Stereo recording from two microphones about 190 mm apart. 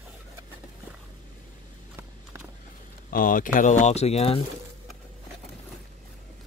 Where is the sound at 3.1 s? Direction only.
45° left (ahead or behind).